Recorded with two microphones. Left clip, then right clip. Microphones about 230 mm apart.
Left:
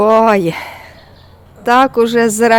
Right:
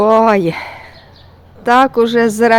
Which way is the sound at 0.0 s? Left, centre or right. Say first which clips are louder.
Even; centre.